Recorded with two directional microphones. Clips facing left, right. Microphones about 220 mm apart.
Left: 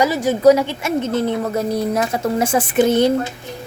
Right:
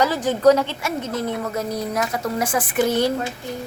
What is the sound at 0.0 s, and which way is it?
A woman's voice, 10° left (ahead or behind).